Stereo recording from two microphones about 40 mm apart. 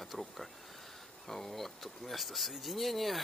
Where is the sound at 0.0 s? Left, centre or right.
Centre.